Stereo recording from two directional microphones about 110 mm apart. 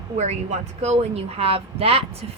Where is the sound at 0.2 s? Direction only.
90° right.